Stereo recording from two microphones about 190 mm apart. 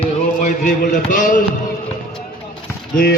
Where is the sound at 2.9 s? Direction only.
50° left (ahead or behind).